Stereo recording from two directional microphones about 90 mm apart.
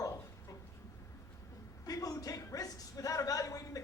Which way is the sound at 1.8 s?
40° left (ahead or behind).